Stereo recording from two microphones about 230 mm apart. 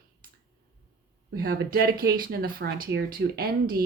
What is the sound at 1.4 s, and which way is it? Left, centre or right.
Speech, right.